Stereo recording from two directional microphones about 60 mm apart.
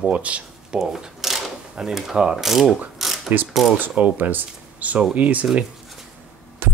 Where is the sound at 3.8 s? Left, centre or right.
Right.